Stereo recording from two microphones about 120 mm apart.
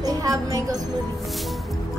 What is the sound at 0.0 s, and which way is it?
Music, 30° right (ahead or behind).